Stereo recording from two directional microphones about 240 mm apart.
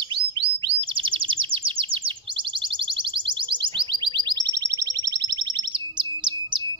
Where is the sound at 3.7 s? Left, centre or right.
Right.